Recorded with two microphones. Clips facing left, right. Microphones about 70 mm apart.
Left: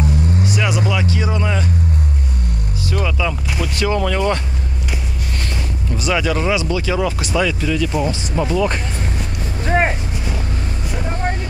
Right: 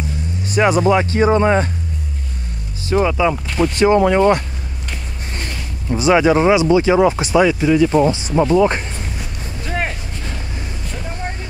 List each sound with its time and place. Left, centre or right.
0.5 s speech: right
2.9 s speech: right
5.9 s speech: right
9.7 s vehicle: left